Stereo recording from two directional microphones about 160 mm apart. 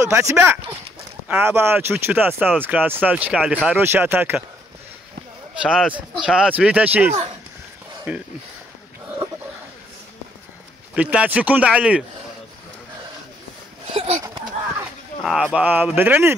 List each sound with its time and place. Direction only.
0.0 s speech: 20° right (ahead or behind)
5.6 s speech: 5° right (ahead or behind)
11.0 s speech: 10° right (ahead or behind)
13.9 s speech: 40° right (ahead or behind)
15.2 s speech: 5° right (ahead or behind)